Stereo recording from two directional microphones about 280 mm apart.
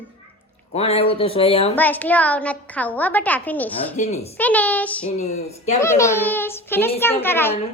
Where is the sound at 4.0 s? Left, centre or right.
Left.